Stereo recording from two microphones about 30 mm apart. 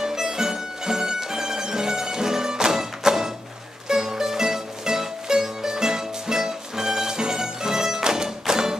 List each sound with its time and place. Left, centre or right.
0.0 s music: centre